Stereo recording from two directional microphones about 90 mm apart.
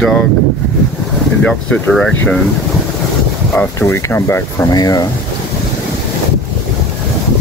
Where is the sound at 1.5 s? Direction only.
10° left (ahead or behind).